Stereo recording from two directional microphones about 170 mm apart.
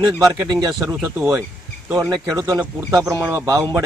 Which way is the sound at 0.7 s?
Centre (ahead or behind).